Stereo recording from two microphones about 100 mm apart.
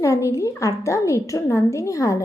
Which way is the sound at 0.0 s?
30° left (ahead or behind).